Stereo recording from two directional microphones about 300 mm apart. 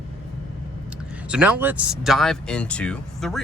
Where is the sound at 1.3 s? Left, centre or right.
Centre.